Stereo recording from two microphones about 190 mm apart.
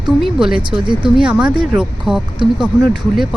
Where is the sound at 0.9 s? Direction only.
25° right (ahead or behind).